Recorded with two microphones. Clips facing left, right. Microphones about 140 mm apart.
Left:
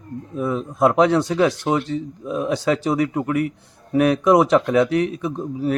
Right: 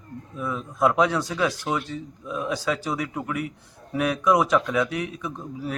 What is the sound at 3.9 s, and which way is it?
Speech, 55° left (ahead or behind).